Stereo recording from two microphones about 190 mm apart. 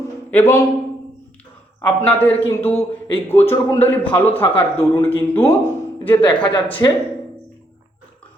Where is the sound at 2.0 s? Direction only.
10° left (ahead or behind).